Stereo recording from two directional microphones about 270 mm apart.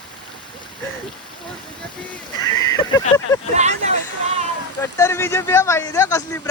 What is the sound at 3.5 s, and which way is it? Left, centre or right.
Hubbub, right.